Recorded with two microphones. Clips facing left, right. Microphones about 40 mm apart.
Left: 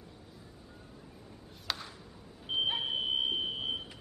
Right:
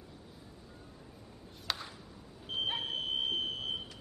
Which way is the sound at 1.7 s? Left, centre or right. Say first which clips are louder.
Even; centre.